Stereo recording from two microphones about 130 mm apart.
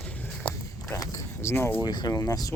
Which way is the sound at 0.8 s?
25° left (ahead or behind).